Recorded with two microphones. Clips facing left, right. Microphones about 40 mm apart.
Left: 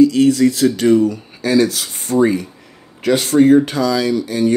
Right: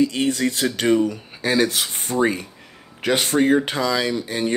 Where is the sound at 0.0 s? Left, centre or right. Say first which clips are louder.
Left 9 dB; right.